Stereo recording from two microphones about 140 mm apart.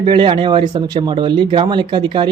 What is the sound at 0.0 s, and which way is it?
Speech, 35° right (ahead or behind).